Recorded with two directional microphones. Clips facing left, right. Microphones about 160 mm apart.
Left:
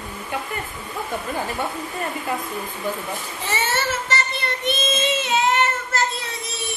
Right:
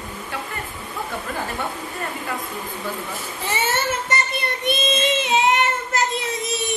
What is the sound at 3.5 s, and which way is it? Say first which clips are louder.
Speech: right 1 dB; 10° right (ahead or behind).